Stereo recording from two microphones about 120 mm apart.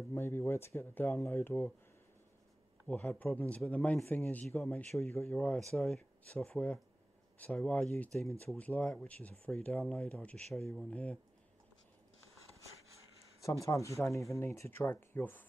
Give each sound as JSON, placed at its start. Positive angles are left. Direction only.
{"t": 0.1, "sound": "speech", "side_deg": 20}
{"t": 2.9, "sound": "speech", "side_deg": 10}
{"t": 13.7, "sound": "speech", "side_deg": 25}